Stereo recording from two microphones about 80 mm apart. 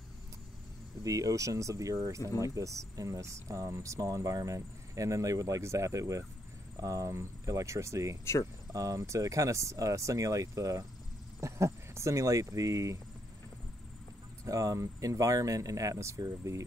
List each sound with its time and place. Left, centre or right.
1.0 s speech: right
14.4 s speech: right